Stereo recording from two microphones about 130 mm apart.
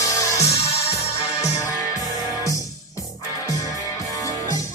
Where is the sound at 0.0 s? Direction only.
25° left (ahead or behind).